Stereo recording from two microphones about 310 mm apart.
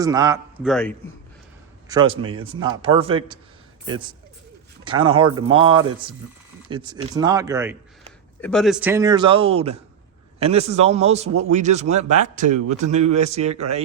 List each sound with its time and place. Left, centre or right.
0.0 s a man's voice: centre
1.9 s a man's voice: centre
8.4 s a man's voice: centre; by 11.3 s right
11.3 s speech: right
11.5 s a man's voice: right